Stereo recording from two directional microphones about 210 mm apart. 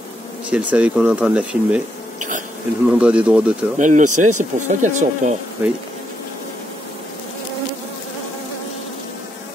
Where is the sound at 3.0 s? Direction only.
5° right (ahead or behind).